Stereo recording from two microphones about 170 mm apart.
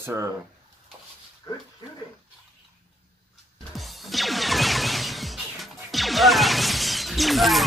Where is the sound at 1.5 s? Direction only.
20° left (ahead or behind).